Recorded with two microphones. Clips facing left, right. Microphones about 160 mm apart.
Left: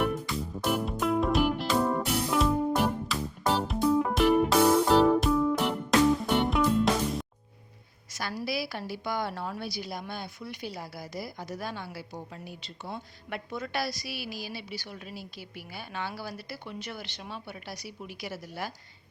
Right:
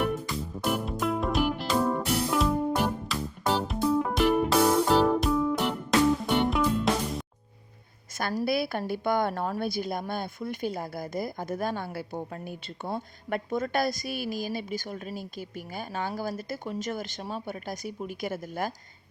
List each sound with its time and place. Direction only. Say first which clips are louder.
0.0 s music: even; centre (ahead or behind)
8.1 s a woman's voice: right 5 dB; 45° right (ahead or behind)